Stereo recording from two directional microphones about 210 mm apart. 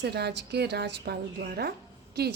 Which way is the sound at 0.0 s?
50° right (ahead or behind).